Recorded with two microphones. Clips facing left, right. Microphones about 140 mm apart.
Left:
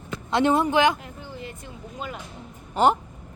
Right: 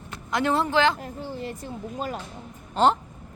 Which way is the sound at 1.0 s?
35° right (ahead or behind).